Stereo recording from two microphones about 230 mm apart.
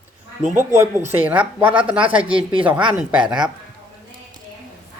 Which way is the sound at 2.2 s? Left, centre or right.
Right.